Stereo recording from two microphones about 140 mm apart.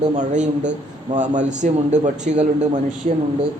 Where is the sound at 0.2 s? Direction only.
60° right (ahead or behind).